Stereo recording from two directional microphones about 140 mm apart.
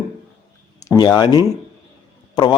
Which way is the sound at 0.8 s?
25° left (ahead or behind).